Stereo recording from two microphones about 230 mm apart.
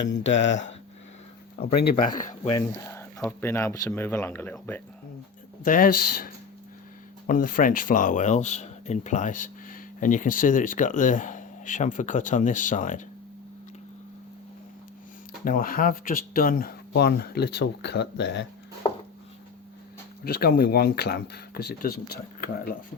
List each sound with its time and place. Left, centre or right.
0.1 s speech: left
2.5 s speech: centre
5.6 s speech: left
15.4 s speech: left
20.2 s speech: left